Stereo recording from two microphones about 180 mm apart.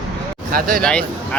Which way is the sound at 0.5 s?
55° right (ahead or behind).